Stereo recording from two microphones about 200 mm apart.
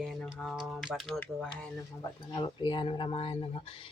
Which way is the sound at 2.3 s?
25° left (ahead or behind).